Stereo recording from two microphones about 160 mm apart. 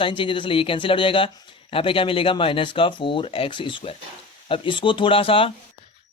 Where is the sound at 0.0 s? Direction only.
30° left (ahead or behind).